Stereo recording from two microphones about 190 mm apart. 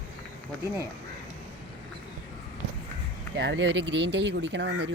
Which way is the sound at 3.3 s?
80° right.